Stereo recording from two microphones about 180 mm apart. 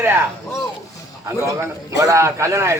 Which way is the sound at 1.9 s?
20° right (ahead or behind).